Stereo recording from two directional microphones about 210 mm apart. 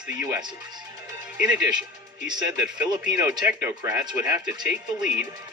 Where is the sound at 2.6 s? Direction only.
10° right (ahead or behind).